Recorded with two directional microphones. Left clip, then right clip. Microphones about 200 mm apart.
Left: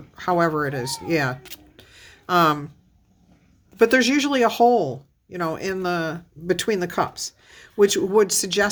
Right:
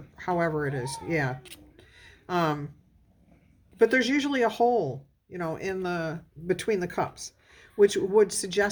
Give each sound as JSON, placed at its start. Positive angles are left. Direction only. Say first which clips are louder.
{"t": 0.2, "sound": "speech", "louder": "left 7 dB", "side_deg": 25}
{"t": 1.7, "sound": "a sound", "louder": "left 6 dB", "side_deg": 25}
{"t": 3.8, "sound": "speech", "louder": "left 5 dB", "side_deg": 25}